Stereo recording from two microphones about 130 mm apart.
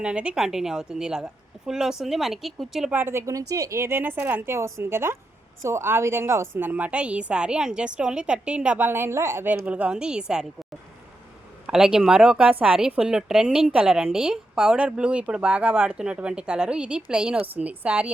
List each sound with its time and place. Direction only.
0.0 s speech: 10° right (ahead or behind)
2.9 s a woman's voice: 15° right (ahead or behind)
11.6 s a woman's voice: 5° right (ahead or behind)